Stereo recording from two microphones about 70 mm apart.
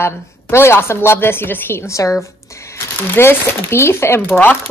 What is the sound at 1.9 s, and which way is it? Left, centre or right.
Speech, left.